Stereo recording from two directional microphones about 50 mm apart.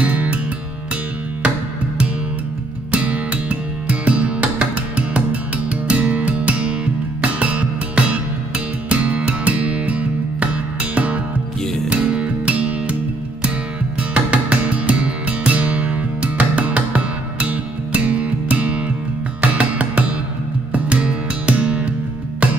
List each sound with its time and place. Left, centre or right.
0.0 s music: right
2.9 s music: right
14.1 s music: right